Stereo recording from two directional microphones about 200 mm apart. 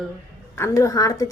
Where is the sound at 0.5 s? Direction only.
15° left (ahead or behind).